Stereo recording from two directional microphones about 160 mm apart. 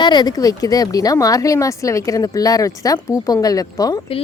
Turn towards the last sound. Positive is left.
turn(degrees=20)  # may be behind; listen again after turning